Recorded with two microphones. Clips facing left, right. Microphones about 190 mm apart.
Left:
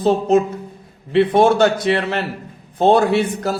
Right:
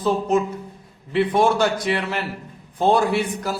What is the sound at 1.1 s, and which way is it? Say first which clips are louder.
Speech: left 5 dB; 25° left (ahead or behind).